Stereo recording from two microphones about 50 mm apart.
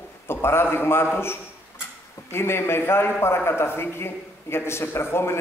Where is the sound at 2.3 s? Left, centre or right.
Left.